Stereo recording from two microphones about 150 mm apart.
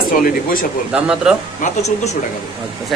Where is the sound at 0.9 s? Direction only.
5° right (ahead or behind).